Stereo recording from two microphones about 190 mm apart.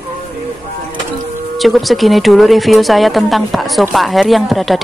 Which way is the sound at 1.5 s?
Centre (ahead or behind).